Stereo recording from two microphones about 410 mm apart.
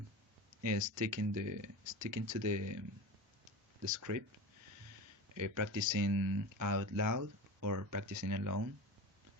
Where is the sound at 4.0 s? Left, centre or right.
Right.